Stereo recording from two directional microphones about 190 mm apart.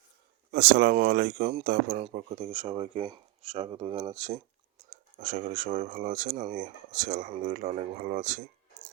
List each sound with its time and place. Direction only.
0.5 s speech: 50° right (ahead or behind)
2.0 s speech: 35° right (ahead or behind)